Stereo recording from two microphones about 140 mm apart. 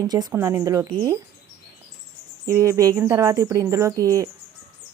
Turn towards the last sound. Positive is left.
turn(degrees=-25)  # may be behind; listen again after turning